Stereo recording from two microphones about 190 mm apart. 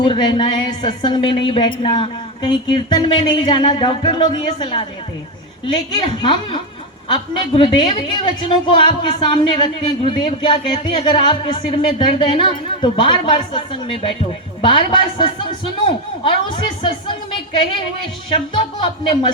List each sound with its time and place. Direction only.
0.0 s a woman's voice: 25° left (ahead or behind)
18.3 s a woman's voice: 25° left (ahead or behind)